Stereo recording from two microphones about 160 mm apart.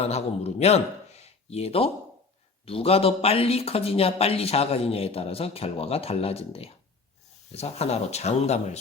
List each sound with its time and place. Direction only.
0.1 s a man's voice: 40° left (ahead or behind)